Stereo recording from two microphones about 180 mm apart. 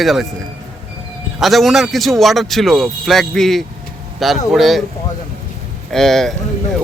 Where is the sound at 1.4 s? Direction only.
Centre (ahead or behind).